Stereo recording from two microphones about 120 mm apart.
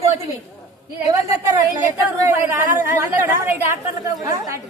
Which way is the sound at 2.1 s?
20° right (ahead or behind).